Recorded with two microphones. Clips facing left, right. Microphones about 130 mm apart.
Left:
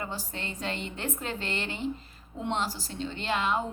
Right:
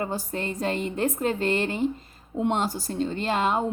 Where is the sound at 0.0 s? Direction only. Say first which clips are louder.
Right 7 dB; 45° right (ahead or behind).